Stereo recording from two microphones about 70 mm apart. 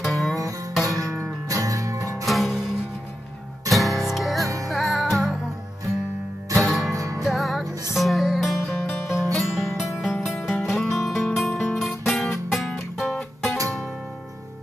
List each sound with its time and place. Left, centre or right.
0.0 s music: centre
0.8 s music: right
2.2 s music: centre
3.7 s music: centre
6.6 s music: centre
6.9 s music: right
7.2 s music: centre